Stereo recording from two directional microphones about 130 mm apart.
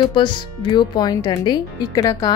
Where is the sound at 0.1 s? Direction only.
35° left (ahead or behind).